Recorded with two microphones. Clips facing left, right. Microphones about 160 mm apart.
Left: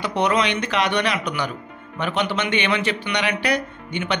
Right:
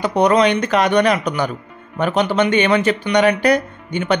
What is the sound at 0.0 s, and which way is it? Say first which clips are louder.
Speech: right 7 dB; 40° right (ahead or behind).